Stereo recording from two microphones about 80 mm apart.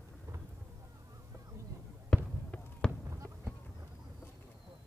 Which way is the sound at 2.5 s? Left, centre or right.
Centre.